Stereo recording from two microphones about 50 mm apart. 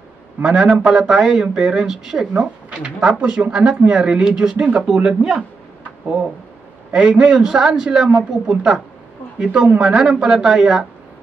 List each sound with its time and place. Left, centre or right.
0.4 s speech: centre
6.9 s speech: centre